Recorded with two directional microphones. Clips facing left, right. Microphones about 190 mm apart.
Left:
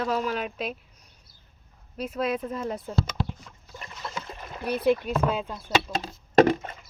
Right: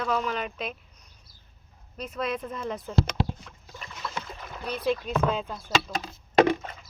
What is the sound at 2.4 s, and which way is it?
Speech, 40° left (ahead or behind).